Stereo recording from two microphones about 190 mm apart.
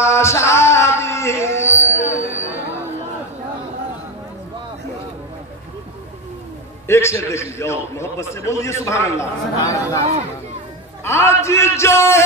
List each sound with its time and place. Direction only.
0.0 s music: 15° left (ahead or behind)
2.0 s music: 40° left (ahead or behind)
6.9 s a man's voice: 15° left (ahead or behind)
11.1 s a man's voice: 15° left (ahead or behind)